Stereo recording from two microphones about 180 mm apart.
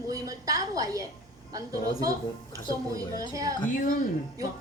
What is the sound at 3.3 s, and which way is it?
Speech, 20° right (ahead or behind).